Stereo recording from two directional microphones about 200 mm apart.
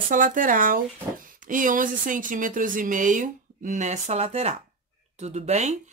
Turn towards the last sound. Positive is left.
turn(degrees=-35)  # may be behind; listen again after turning